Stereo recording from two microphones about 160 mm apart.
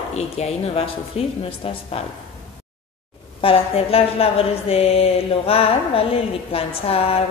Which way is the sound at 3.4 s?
35° left (ahead or behind).